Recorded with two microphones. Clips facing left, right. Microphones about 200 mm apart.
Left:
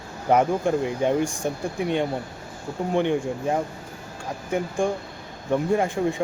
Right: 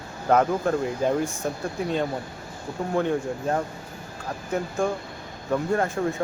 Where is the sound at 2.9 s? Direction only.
20° left (ahead or behind).